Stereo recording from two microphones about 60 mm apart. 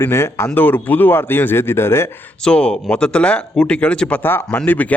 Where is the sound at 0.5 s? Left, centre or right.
Left.